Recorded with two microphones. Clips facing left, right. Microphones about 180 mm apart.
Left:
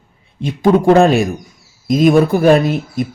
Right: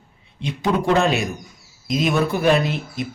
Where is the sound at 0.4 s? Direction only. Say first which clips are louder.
Left 9 dB; 50° left (ahead or behind).